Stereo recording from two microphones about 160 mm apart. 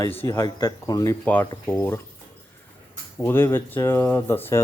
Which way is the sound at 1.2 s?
10° left (ahead or behind).